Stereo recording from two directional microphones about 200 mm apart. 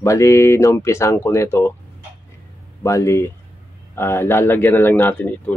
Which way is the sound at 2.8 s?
15° left (ahead or behind).